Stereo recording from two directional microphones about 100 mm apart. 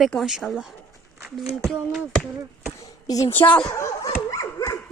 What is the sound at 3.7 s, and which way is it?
Speech, 30° left (ahead or behind).